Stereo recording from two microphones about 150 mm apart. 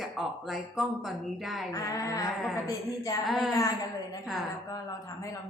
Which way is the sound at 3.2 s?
Centre (ahead or behind).